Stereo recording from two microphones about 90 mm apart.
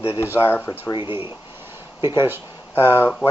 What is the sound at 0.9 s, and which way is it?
Speech, 70° left (ahead or behind).